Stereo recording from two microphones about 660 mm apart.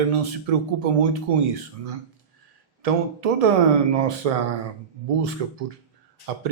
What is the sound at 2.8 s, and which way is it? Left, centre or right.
Speech, right.